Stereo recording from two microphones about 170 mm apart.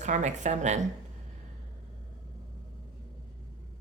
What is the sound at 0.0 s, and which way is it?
Speech, 45° right (ahead or behind).